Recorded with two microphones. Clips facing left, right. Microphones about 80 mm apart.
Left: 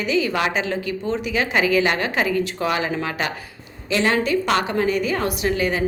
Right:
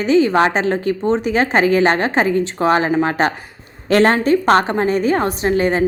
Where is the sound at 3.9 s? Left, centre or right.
Right.